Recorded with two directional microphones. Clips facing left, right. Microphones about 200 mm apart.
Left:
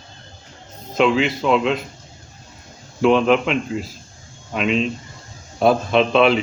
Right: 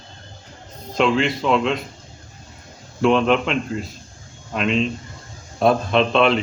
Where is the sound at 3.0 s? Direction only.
Centre (ahead or behind).